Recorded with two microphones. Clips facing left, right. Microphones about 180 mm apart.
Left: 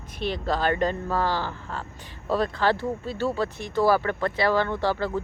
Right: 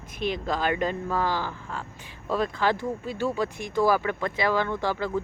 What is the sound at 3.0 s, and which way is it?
Speech, 15° right (ahead or behind).